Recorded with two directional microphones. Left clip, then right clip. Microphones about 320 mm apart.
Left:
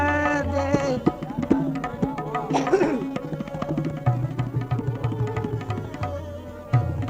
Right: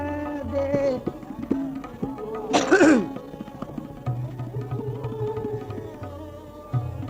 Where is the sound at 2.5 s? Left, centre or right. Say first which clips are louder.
Right 5 dB; right.